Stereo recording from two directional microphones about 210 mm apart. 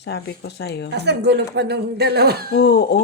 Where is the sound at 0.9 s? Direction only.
55° right (ahead or behind).